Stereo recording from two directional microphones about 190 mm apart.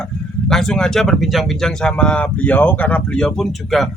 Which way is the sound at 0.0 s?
5° left (ahead or behind).